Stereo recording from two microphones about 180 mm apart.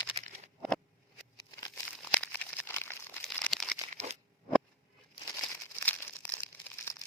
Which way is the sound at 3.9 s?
40° right (ahead or behind).